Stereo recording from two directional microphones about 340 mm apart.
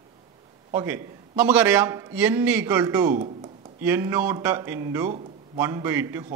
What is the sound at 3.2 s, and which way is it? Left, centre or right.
Speech, centre.